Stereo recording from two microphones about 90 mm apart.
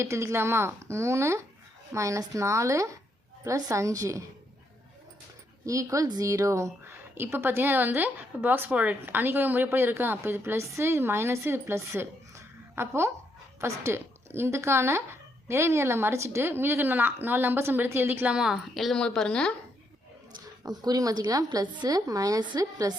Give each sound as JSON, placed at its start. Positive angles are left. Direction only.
{"t": 0.0, "sound": "a woman's voice", "side_deg": -30}
{"t": 5.6, "sound": "a woman's voice", "side_deg": -40}
{"t": 7.2, "sound": "a woman's voice", "side_deg": -25}
{"t": 18.3, "sound": "a woman's voice", "side_deg": -10}
{"t": 20.7, "sound": "a woman's voice", "side_deg": -45}